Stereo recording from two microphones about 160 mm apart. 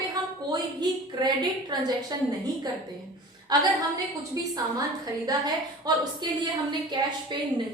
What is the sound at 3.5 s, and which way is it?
Speech, 25° right (ahead or behind).